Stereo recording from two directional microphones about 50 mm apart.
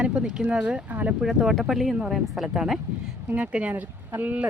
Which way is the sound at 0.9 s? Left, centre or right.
Right.